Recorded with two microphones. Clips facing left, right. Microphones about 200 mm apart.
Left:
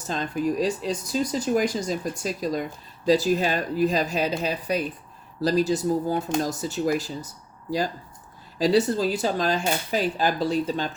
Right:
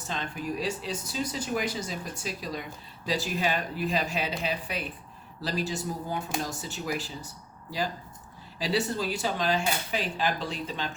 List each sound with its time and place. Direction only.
0.1 s speech: 40° left (ahead or behind)
8.5 s speech: 40° left (ahead or behind)